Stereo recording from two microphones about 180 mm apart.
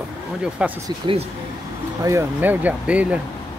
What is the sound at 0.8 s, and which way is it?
Speech, 25° right (ahead or behind).